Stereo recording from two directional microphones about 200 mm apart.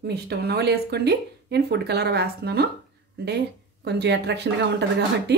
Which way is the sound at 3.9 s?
60° right (ahead or behind).